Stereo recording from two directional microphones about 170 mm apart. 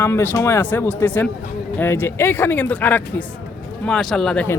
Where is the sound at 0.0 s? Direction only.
15° left (ahead or behind).